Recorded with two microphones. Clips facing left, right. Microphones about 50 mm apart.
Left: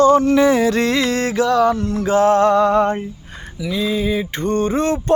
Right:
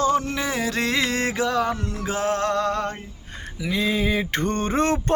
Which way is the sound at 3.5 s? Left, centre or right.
Right.